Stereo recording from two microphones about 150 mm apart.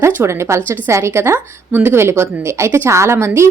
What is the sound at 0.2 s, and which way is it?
A woman's voice, 20° right (ahead or behind).